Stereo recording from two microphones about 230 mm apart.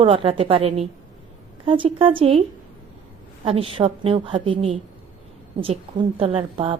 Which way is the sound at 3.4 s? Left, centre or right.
Right.